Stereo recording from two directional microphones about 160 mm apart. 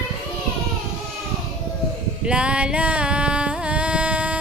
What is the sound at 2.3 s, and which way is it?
Music, 5° right (ahead or behind).